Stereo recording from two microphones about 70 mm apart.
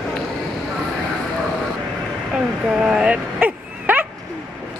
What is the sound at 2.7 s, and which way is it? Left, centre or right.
Dog, centre.